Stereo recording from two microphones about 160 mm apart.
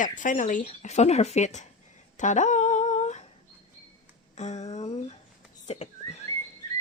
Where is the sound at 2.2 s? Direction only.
50° left (ahead or behind).